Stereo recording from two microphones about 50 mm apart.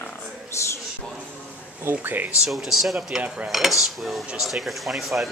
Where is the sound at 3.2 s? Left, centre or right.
Right.